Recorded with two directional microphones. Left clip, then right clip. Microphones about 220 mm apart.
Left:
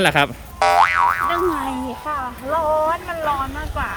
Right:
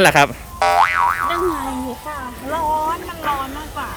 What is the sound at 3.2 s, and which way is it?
Speech, 10° left (ahead or behind).